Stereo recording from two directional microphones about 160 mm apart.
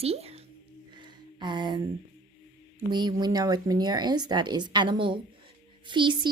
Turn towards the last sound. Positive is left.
turn(degrees=-30)  # may be behind; listen again after turning